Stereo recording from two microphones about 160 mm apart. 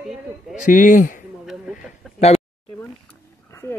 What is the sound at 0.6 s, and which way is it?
Speech, 50° left (ahead or behind).